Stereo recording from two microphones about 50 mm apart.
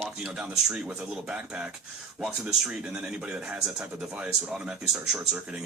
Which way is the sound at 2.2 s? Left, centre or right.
Centre.